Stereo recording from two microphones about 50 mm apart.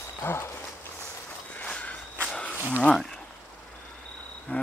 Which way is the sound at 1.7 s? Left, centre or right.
Left.